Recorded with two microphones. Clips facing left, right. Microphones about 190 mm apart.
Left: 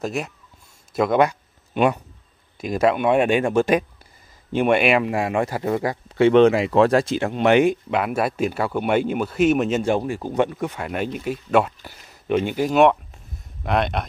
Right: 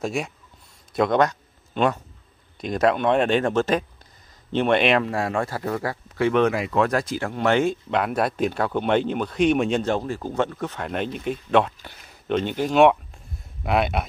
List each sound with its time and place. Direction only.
0.0 s speech: centre (ahead or behind)